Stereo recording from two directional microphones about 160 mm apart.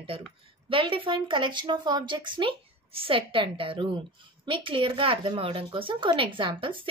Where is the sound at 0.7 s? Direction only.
35° right (ahead or behind).